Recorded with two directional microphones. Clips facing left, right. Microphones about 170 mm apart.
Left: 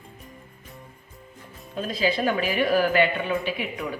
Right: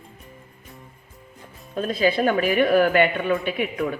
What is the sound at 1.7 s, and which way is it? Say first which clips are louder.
A man's voice: right 4 dB; 55° right (ahead or behind).